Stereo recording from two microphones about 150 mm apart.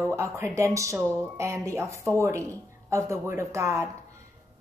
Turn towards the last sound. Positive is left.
turn(degrees=-20)  # may be behind; listen again after turning